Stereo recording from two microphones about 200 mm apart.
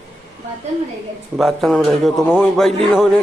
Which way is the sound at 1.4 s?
Centre (ahead or behind).